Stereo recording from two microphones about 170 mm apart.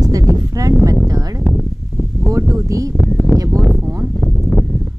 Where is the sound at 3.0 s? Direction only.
Centre (ahead or behind).